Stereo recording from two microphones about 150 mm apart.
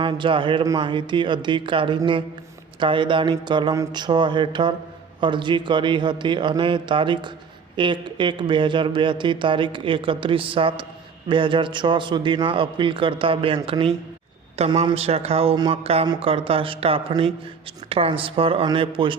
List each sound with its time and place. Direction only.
0.0 s speech: 35° right (ahead or behind)